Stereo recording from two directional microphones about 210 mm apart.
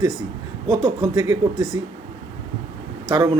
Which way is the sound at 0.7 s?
Centre (ahead or behind).